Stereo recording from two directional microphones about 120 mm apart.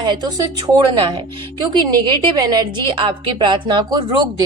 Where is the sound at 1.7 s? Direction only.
40° right (ahead or behind).